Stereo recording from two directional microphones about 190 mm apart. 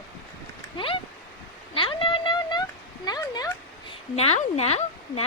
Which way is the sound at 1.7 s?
25° left (ahead or behind).